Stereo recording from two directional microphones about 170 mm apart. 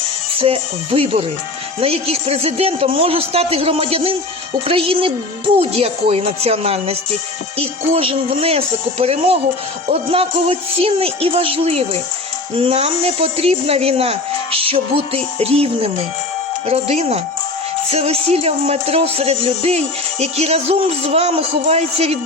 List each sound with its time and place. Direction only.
0.3 s music: 35° right (ahead or behind)